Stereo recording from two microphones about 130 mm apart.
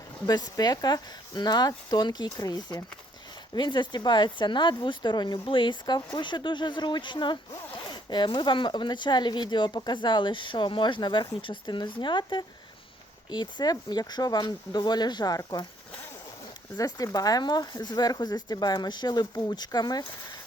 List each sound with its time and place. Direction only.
0.3 s speech: 30° left (ahead or behind)
16.7 s speech: 30° left (ahead or behind)